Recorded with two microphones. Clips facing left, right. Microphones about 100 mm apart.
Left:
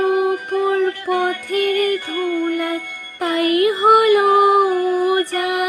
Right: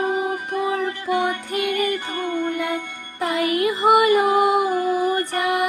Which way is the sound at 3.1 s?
60° left (ahead or behind).